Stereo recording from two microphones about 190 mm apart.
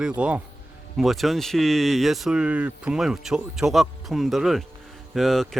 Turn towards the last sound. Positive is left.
turn(degrees=0)  # may be behind; listen again after turning